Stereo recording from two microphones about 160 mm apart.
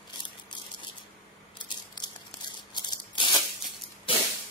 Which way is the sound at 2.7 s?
25° left (ahead or behind).